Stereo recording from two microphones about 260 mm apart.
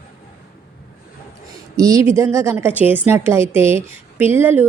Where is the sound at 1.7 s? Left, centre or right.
Centre.